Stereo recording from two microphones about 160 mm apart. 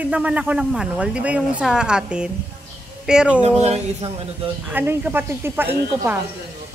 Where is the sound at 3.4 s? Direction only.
40° right (ahead or behind).